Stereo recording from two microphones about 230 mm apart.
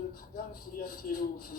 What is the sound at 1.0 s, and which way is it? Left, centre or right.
Speech, left.